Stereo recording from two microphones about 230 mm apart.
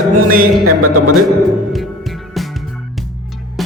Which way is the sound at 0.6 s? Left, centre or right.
Right.